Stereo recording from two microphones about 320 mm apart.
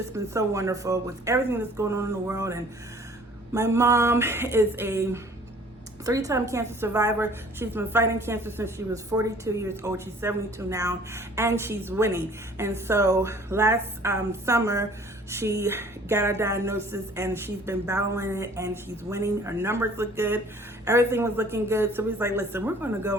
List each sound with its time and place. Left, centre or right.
0.1 s a woman's voice: centre